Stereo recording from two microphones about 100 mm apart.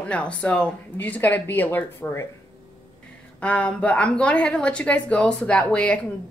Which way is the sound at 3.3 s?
10° left (ahead or behind).